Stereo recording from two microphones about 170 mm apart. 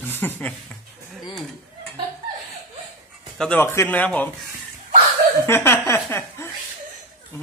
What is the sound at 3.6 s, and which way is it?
Speech, 15° left (ahead or behind).